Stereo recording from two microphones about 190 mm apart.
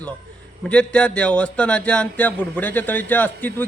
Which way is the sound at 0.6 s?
5° left (ahead or behind).